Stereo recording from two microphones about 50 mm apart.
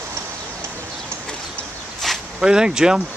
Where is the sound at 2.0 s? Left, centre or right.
Centre.